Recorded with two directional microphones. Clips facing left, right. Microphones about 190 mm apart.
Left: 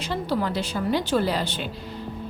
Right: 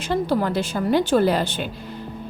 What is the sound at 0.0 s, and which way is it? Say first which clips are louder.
A woman's voice: right 4 dB; 50° right (ahead or behind).